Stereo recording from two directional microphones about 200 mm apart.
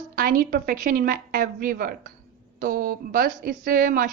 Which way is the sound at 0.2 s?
45° right (ahead or behind).